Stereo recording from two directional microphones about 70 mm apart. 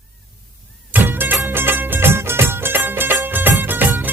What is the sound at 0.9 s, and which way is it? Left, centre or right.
Music, right.